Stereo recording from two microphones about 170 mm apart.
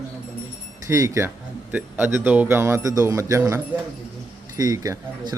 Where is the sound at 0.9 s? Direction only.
15° right (ahead or behind).